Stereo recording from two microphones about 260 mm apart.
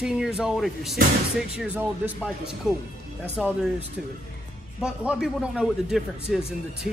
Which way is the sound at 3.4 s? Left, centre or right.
Centre.